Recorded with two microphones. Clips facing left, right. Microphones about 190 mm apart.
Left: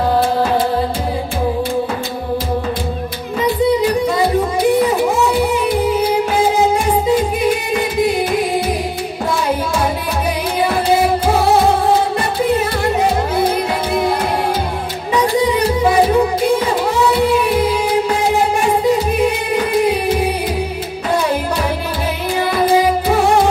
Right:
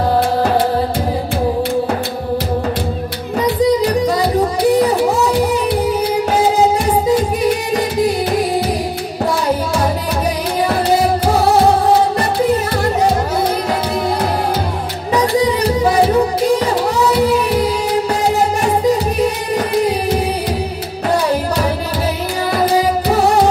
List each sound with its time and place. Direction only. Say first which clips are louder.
4.6 s music: right 1 dB; 35° right (ahead or behind)
7.7 s music: even; 40° right (ahead or behind)
16.4 s music: right 1 dB; 40° right (ahead or behind)
19.1 s music: left 1 dB; 40° right (ahead or behind)
22.5 s music: left 1 dB; 40° right (ahead or behind)